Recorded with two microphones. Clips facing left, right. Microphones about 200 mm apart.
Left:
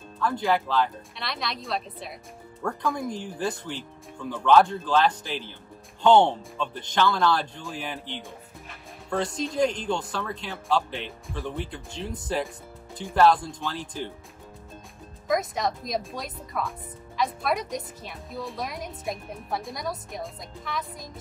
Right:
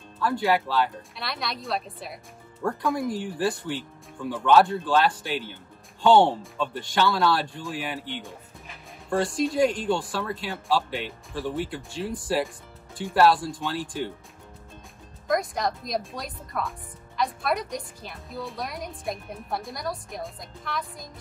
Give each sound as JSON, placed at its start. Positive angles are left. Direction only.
{"t": 0.2, "sound": "speech", "side_deg": -5}
{"t": 15.2, "sound": "speech", "side_deg": 0}